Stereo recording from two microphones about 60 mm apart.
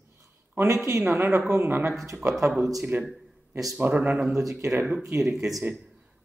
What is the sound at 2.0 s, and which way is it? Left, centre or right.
Speech, right.